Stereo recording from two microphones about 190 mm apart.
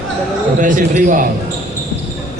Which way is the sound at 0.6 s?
45° right (ahead or behind).